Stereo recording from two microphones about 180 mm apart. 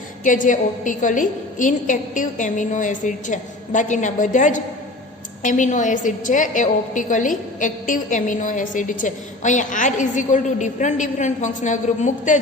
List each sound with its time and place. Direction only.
0.3 s a woman's voice: 45° left (ahead or behind)